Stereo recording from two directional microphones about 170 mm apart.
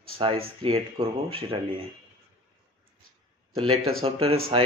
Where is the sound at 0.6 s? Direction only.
30° right (ahead or behind).